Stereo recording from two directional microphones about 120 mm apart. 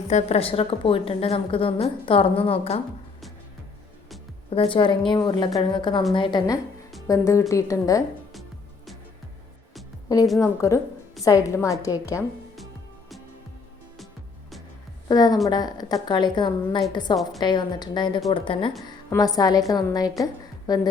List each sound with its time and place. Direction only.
0.1 s a woman's voice: 70° left (ahead or behind)
4.4 s a woman's voice: 50° left (ahead or behind)
7.1 s a woman's voice: 25° left (ahead or behind)
10.4 s a woman's voice: 25° left (ahead or behind)
15.1 s a woman's voice: 35° left (ahead or behind)
19.1 s a woman's voice: 30° left (ahead or behind)